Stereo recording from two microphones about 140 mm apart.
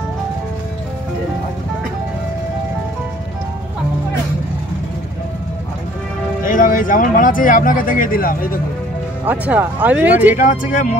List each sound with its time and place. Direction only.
6.4 s speech: 75° left (ahead or behind)
9.2 s speech: 10° right (ahead or behind)
10.3 s speech: 65° left (ahead or behind)